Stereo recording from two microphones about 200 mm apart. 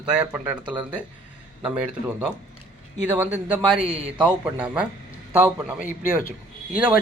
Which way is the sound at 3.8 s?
30° right (ahead or behind).